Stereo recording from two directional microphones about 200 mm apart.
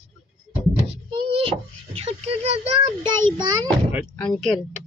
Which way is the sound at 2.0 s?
30° right (ahead or behind).